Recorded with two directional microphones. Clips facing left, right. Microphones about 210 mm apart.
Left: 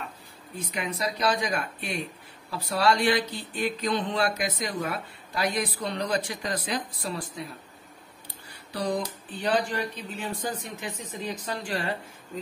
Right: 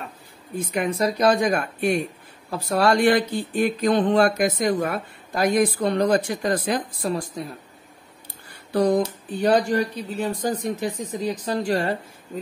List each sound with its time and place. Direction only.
0.6 s speech: 50° right (ahead or behind)
8.7 s speech: 45° right (ahead or behind)